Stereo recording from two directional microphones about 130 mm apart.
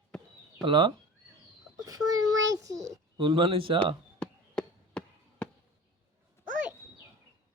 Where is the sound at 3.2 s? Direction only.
40° right (ahead or behind).